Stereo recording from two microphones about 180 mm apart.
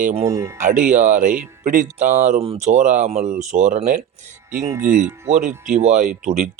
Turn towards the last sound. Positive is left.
turn(degrees=-40)  # may be behind; listen again after turning